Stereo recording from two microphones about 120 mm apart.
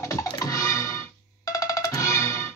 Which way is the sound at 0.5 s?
30° left (ahead or behind).